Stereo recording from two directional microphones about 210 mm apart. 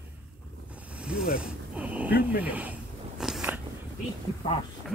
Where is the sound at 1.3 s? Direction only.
5° right (ahead or behind).